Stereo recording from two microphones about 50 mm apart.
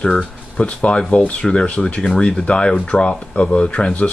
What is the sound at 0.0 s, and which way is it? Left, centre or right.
Speech, centre.